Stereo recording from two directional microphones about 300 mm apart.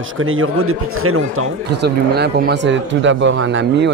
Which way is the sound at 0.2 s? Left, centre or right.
Right.